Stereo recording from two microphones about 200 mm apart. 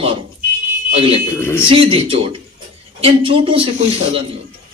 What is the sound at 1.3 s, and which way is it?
Speech, 10° left (ahead or behind).